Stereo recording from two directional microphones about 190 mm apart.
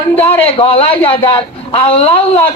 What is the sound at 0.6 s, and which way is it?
A man's voice, 30° left (ahead or behind).